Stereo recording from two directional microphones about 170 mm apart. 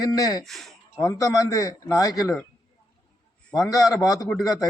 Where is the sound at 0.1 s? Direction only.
25° left (ahead or behind).